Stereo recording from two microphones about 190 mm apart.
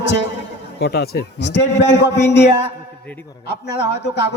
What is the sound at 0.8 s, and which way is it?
A man's voice, 55° left (ahead or behind).